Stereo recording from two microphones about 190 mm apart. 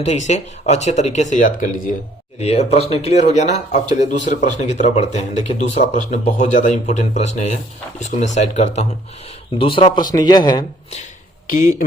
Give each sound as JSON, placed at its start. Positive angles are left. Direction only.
{"t": 0.0, "sound": "speech", "side_deg": 40}
{"t": 11.4, "sound": "speech", "side_deg": 45}